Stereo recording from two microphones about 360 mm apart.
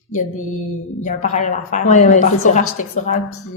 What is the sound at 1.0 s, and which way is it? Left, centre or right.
A woman's voice, centre.